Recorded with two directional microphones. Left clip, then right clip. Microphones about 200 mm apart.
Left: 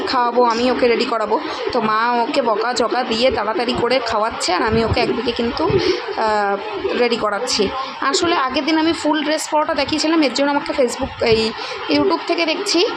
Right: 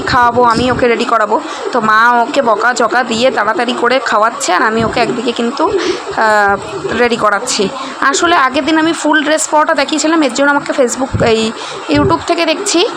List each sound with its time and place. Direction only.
0.1 s a woman's voice: 10° right (ahead or behind)